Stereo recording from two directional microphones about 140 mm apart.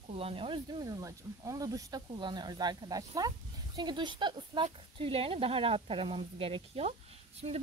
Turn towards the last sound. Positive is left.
turn(degrees=-50)  # may be behind; listen again after turning